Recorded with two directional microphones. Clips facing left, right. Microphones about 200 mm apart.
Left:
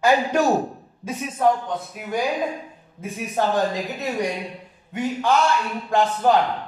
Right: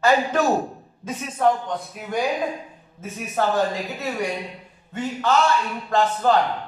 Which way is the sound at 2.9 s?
15° left (ahead or behind).